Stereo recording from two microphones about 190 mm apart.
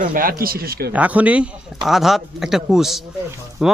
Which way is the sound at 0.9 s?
10° right (ahead or behind).